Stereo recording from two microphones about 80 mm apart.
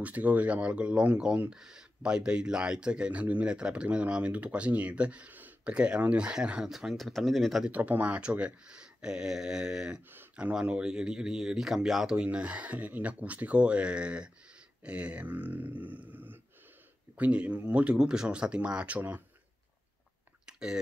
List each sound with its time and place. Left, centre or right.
0.0 s speech: right; by 7.7 s centre
7.7 s speech: centre
20.4 s chewing: centre